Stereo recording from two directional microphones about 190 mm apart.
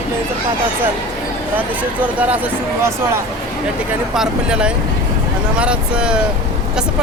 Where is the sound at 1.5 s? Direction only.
10° right (ahead or behind).